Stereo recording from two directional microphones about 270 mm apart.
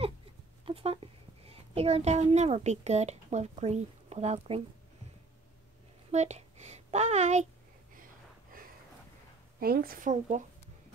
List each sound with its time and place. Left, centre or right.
0.7 s a woman's voice: right
6.1 s a woman's voice: right
9.6 s a woman's voice: right